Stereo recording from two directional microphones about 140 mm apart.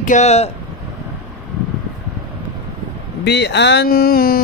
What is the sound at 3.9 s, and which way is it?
Speech, 90° left.